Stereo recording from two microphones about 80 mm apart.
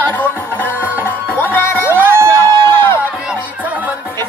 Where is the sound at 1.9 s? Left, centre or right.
Right.